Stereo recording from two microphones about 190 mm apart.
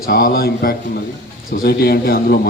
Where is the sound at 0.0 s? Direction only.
50° left (ahead or behind).